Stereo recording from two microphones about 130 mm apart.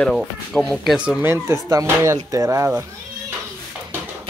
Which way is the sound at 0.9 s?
10° right (ahead or behind).